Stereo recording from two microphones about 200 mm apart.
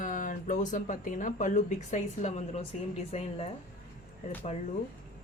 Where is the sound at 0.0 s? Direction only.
40° left (ahead or behind).